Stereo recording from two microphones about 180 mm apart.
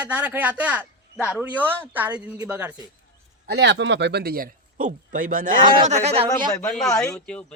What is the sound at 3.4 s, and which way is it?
Speech, 70° right (ahead or behind).